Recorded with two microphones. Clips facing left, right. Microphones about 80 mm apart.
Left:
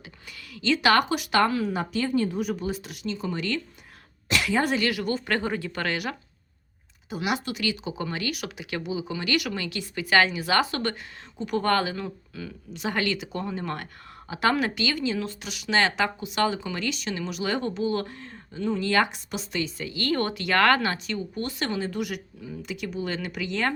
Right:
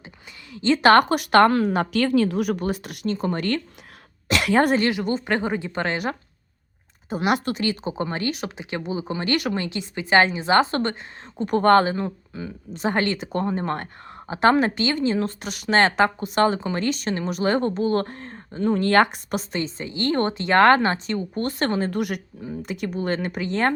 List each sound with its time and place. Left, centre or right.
0.5 s a woman's voice: right
4.3 s a woman's voice: right
4.9 s speech: right
7.1 s a woman's voice: right
19.5 s a woman's voice: right